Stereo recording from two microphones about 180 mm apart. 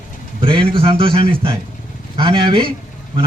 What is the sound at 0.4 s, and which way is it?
A man's voice, 30° right (ahead or behind).